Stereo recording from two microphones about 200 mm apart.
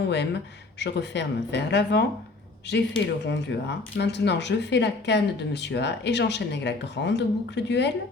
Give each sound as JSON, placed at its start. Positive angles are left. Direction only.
{"t": 0.8, "sound": "speech", "side_deg": 60}